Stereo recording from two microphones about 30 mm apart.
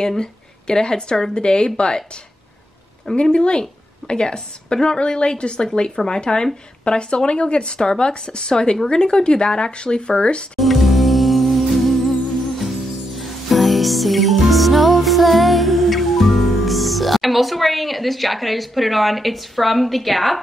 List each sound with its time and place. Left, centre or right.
0.2 s a woman's voice: left
3.2 s a woman's voice: left
10.6 s music: centre